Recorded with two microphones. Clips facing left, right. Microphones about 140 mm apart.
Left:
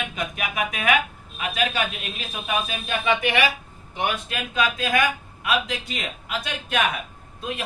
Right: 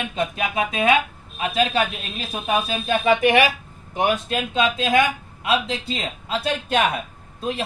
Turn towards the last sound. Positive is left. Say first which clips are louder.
# right 5 dB
turn(degrees=-30)  # may be behind; listen again after turning